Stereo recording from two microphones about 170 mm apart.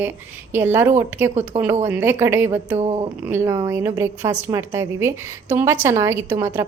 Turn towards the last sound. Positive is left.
turn(degrees=-15)  # may be behind; listen again after turning